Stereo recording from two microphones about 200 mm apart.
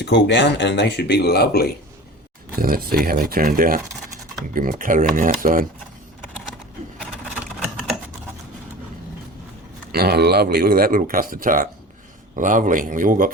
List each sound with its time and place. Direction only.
0.0 s speech: 60° left (ahead or behind)
2.6 s speech: 45° right (ahead or behind)
9.9 s a man's voice: 55° right (ahead or behind)